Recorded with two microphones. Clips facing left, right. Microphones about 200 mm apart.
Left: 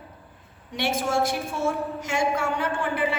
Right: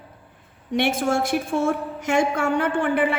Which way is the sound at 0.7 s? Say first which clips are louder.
Right 4 dB; 55° right (ahead or behind).